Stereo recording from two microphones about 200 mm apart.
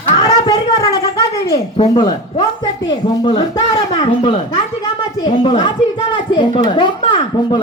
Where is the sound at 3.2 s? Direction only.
20° left (ahead or behind).